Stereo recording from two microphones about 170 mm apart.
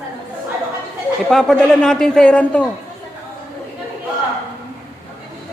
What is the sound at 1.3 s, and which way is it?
A man's voice, 5° left (ahead or behind).